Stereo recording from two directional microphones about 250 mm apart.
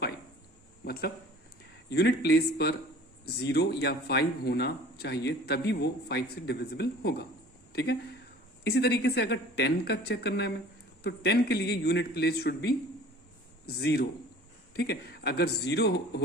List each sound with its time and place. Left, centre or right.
1.9 s speech: left